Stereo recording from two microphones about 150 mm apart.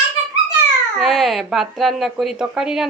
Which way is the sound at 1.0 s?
Centre (ahead or behind).